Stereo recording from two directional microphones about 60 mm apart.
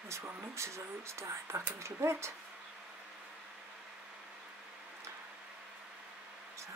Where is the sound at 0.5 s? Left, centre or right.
Right.